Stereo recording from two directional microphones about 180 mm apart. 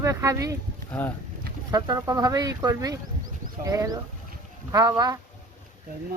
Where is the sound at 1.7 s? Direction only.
20° right (ahead or behind).